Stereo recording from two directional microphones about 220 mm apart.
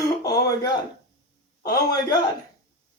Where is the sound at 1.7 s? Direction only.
20° left (ahead or behind).